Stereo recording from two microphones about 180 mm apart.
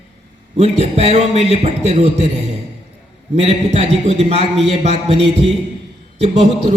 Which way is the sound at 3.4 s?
35° right (ahead or behind).